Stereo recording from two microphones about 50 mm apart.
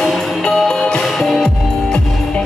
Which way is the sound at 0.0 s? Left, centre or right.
Centre.